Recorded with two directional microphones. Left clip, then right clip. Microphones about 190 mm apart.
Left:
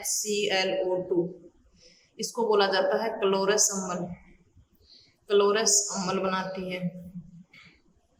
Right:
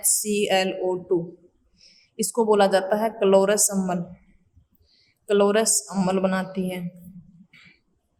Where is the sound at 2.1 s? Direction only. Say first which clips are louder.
Right 5 dB; 45° right (ahead or behind).